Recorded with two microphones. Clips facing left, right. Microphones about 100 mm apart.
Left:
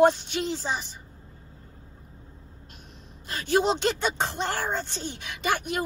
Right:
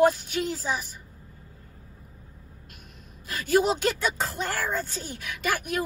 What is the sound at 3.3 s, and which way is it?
Speech, 35° left (ahead or behind).